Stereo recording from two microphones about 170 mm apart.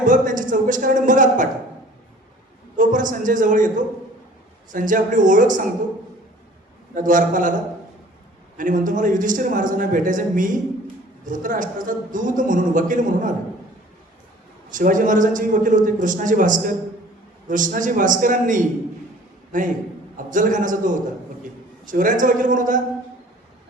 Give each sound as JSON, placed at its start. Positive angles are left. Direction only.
{"t": 0.0, "sound": "a man's voice", "side_deg": -50}
{"t": 2.7, "sound": "a man's voice", "side_deg": -50}
{"t": 6.9, "sound": "a man's voice", "side_deg": -50}
{"t": 8.5, "sound": "a man's voice", "side_deg": -50}
{"t": 14.7, "sound": "a man's voice", "side_deg": -50}